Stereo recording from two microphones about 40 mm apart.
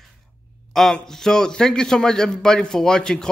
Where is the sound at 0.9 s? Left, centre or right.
Centre.